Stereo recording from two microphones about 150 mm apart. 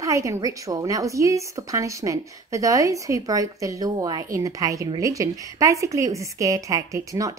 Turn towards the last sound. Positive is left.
turn(degrees=-20)  # may be behind; listen again after turning